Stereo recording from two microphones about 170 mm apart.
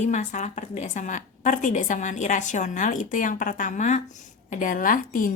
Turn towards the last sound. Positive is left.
turn(degrees=55)  # may be behind; listen again after turning